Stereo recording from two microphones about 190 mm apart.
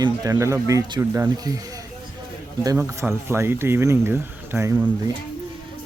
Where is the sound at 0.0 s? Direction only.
20° right (ahead or behind).